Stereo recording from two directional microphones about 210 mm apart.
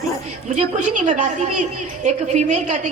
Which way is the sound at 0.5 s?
35° right (ahead or behind).